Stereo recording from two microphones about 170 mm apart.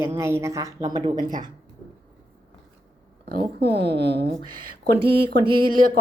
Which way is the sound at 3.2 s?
65° right (ahead or behind).